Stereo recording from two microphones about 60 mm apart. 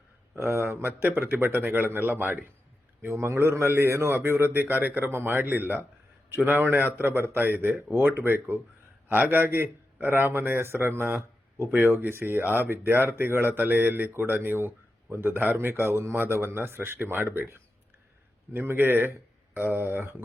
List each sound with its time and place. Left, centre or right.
0.3 s a man's voice: right
3.0 s a man's voice: right